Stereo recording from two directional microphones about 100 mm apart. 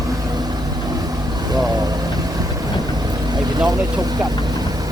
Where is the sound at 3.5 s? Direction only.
40° right (ahead or behind).